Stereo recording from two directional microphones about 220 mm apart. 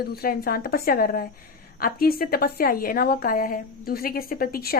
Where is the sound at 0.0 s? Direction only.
45° left (ahead or behind).